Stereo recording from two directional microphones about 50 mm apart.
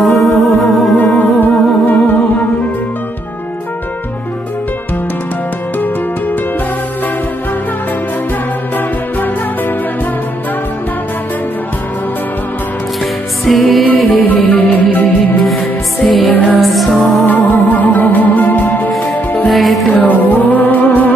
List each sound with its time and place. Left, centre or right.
0.0 s music: centre
0.9 s music: left
8.7 s music: left
13.0 s music: centre
13.8 s music: left
15.4 s music: centre
16.3 s music: left
16.6 s music: centre
17.3 s music: left